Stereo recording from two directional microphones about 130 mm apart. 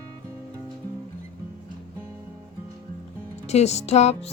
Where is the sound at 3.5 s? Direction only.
55° left (ahead or behind).